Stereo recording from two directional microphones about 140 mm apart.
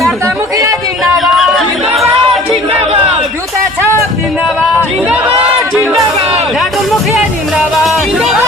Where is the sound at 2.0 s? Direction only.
45° right (ahead or behind).